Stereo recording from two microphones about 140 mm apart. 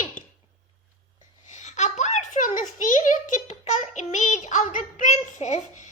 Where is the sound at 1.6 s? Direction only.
60° left (ahead or behind).